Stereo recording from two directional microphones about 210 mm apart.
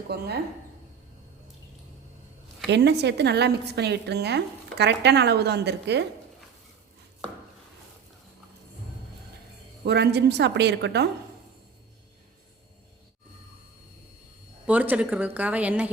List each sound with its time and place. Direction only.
0.1 s speech: 50° right (ahead or behind)
2.6 s speech: 55° right (ahead or behind)
9.8 s speech: 50° right (ahead or behind)
14.7 s speech: 5° right (ahead or behind)